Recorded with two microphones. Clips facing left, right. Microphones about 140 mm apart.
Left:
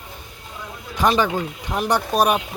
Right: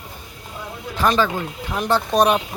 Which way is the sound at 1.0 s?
15° left (ahead or behind).